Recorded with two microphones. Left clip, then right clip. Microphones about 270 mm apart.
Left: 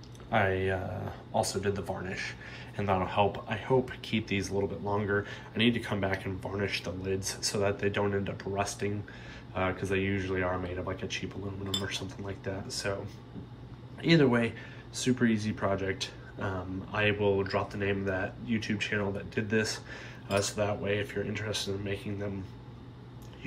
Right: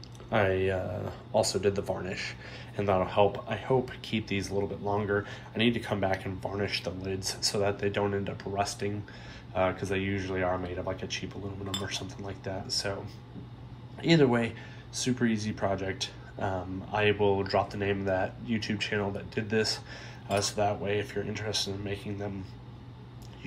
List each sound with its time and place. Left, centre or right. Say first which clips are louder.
0.3 s speech: right 1 dB; right